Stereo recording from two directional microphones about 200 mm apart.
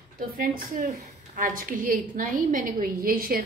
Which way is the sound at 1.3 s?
40° right (ahead or behind).